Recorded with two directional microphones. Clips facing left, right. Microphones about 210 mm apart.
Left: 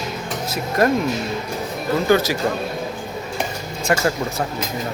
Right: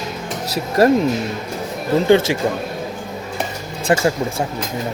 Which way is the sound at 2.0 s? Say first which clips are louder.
Right 3 dB; 25° right (ahead or behind).